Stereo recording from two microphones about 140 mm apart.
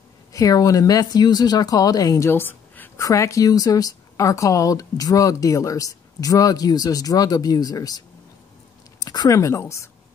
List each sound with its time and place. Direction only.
0.3 s a woman's voice: 25° left (ahead or behind)
9.0 s speech: 30° left (ahead or behind)